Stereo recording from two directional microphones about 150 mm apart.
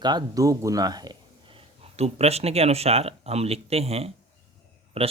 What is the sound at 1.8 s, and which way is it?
Speech, 45° right (ahead or behind).